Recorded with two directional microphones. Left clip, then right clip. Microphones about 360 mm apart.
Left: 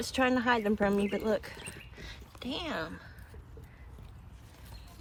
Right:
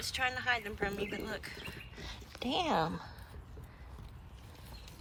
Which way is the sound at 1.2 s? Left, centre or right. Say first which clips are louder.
Left 9 dB; centre.